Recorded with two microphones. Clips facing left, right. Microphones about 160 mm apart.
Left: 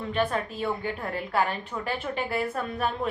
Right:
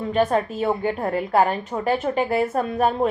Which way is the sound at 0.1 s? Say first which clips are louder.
Right 7 dB; 40° right (ahead or behind).